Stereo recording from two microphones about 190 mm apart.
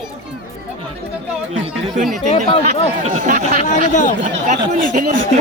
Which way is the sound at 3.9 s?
40° left (ahead or behind).